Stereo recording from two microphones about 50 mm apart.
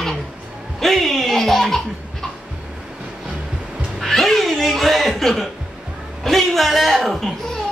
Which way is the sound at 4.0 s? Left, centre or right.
Centre.